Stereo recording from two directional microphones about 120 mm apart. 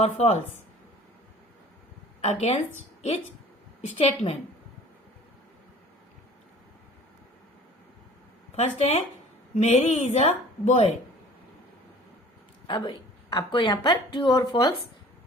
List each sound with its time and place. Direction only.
0.0 s a woman's voice: 60° left (ahead or behind)
2.2 s a woman's voice: 60° left (ahead or behind)
3.9 s a woman's voice: 50° left (ahead or behind)
8.5 s speech: 65° left (ahead or behind)
12.6 s a woman's voice: 40° left (ahead or behind)